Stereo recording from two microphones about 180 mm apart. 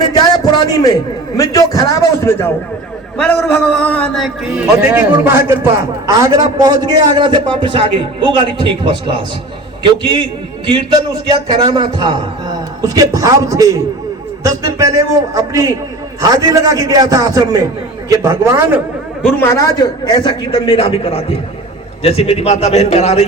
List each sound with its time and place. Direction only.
0.2 s a sound: 20° left (ahead or behind)
1.4 s a man's voice: 20° left (ahead or behind)
4.5 s a man's voice: 5° right (ahead or behind); by 10.2 s 25° right (ahead or behind)
11.3 s a man's voice: 25° right (ahead or behind)
14.8 s a man's voice: 15° right (ahead or behind)
19.2 s a man's voice: 15° left (ahead or behind); by 23.2 s 35° left (ahead or behind)